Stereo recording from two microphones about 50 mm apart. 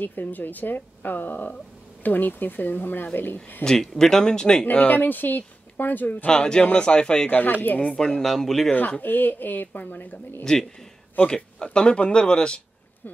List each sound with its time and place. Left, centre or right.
0.0 s speech: left
3.6 s speech: centre
4.6 s speech: left
6.2 s speech: centre
7.2 s speech: left
8.2 s speech: centre
9.0 s speech: left
11.1 s speech: centre